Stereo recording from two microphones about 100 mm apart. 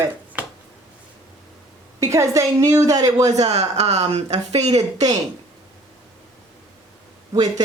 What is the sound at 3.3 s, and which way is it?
Speech, 90° right.